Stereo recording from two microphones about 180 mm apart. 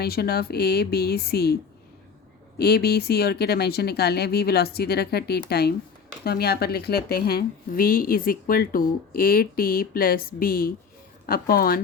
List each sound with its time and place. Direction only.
0.0 s a woman's voice: 60° left (ahead or behind)
2.6 s a woman's voice: 60° left (ahead or behind)